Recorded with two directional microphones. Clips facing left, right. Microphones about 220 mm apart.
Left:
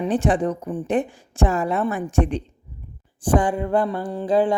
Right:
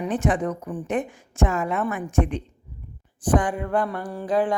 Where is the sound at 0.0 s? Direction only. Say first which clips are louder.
Left 3 dB; 30° left (ahead or behind).